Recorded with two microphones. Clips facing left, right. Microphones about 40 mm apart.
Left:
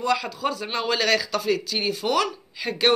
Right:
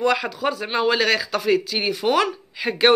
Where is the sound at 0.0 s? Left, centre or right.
Right.